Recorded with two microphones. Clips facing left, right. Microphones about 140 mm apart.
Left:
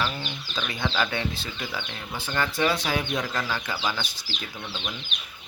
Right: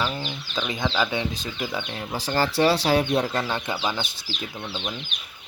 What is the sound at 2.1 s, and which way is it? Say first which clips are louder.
Speech: right 5 dB; 35° right (ahead or behind).